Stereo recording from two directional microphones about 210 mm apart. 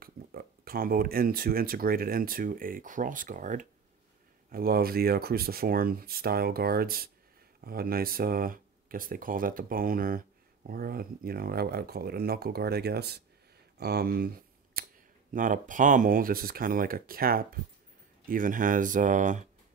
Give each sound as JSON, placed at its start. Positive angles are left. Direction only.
{"t": 0.0, "sound": "speech", "side_deg": -45}